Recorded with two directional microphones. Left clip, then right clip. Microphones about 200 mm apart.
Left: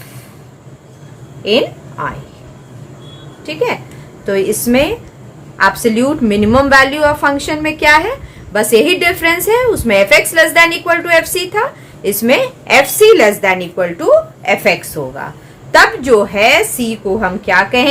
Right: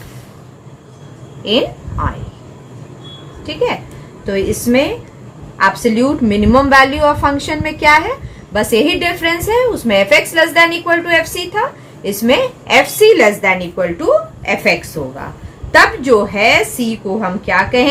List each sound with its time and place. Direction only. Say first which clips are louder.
3.4 s a woman's voice: even; 35° left (ahead or behind)